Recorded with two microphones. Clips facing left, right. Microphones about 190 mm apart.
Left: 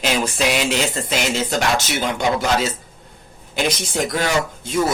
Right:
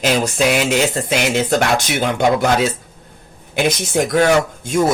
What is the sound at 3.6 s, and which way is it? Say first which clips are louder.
Speech: right 4 dB; 50° right (ahead or behind).